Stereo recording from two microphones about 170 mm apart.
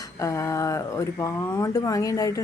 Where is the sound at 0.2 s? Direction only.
15° left (ahead or behind).